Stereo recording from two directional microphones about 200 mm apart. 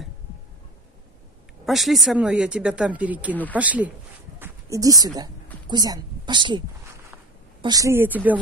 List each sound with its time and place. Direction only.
1.7 s a woman's voice: centre (ahead or behind)